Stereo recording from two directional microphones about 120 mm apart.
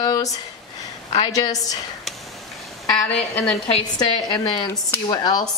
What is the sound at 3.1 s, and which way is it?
Speech, 10° left (ahead or behind).